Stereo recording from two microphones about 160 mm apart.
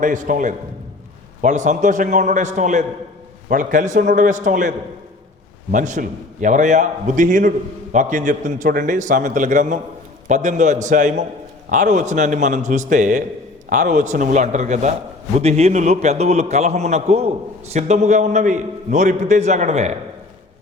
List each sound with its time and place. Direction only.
0.0 s a man's voice: 55° right (ahead or behind)
5.7 s a man's voice: 50° right (ahead or behind)